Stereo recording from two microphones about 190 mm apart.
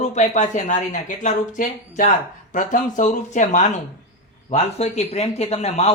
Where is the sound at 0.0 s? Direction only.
40° left (ahead or behind).